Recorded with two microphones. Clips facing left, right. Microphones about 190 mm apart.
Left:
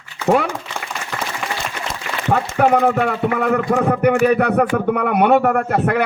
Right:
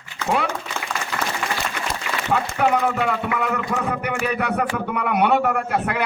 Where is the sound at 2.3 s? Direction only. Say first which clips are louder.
Left 5 dB; 50° left (ahead or behind).